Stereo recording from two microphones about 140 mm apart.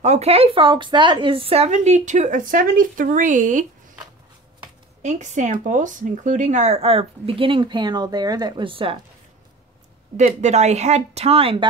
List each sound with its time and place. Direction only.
0.0 s speech: 50° right (ahead or behind)
5.0 s speech: 60° right (ahead or behind); by 9.0 s 40° right (ahead or behind)
10.1 s speech: 55° right (ahead or behind)